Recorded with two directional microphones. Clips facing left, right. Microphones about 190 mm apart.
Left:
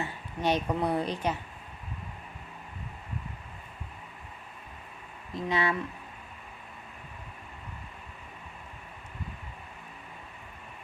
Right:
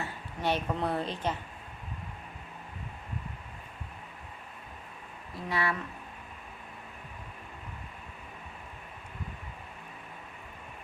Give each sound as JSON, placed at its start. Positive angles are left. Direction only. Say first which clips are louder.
{"t": 0.0, "sound": "a woman's voice", "louder": "left 3 dB", "side_deg": 15}
{"t": 5.3, "sound": "speech", "louder": "left 3 dB", "side_deg": 20}